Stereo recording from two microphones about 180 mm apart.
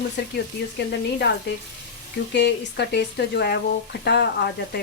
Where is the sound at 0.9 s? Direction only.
70° left (ahead or behind).